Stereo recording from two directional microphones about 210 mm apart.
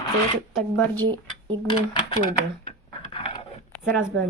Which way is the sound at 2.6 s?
25° left (ahead or behind).